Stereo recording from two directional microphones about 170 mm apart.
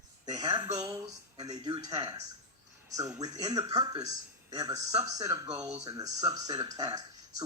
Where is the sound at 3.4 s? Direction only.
25° right (ahead or behind).